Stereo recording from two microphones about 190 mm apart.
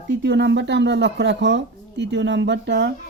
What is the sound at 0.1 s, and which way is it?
A child's voice, 65° right (ahead or behind).